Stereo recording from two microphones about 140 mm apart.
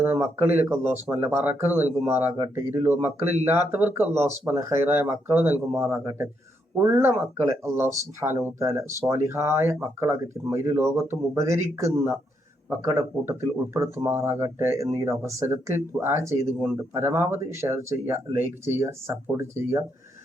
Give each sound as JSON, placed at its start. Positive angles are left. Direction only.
{"t": 0.0, "sound": "speech", "side_deg": -15}